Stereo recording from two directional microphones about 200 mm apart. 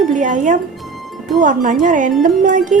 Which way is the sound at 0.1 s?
40° right (ahead or behind).